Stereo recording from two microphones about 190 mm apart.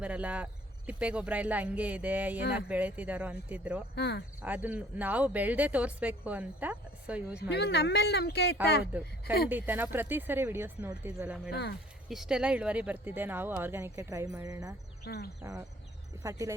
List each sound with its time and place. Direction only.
0.0 s speech: 5° right (ahead or behind)
3.9 s speech: 60° left (ahead or behind)
4.4 s speech: 10° right (ahead or behind)
7.5 s speech: 60° left (ahead or behind)
8.9 s speech: 10° right (ahead or behind)
11.5 s speech: 60° left (ahead or behind)
12.0 s speech: centre (ahead or behind); by 14.8 s 20° right (ahead or behind)
15.0 s speech: 60° left (ahead or behind)
16.2 s speech: 15° right (ahead or behind)